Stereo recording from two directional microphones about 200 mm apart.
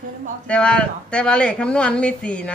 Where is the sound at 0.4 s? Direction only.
5° left (ahead or behind).